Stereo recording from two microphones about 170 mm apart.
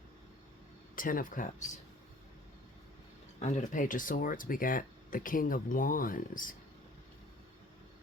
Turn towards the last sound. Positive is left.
turn(degrees=55)  # may be behind; listen again after turning